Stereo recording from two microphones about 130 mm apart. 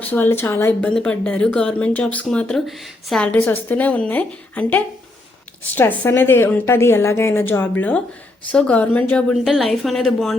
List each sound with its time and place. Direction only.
0.0 s a woman's voice: 15° left (ahead or behind)